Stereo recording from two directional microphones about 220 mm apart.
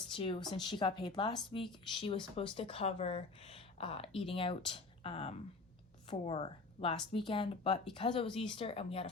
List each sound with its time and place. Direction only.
0.1 s speech: 25° left (ahead or behind)